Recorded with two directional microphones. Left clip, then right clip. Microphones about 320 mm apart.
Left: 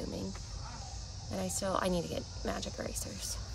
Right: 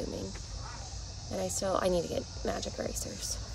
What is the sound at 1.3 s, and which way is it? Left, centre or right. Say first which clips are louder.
Speech: right 3 dB; centre.